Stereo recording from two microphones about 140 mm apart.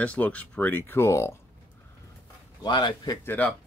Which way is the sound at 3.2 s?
10° left (ahead or behind).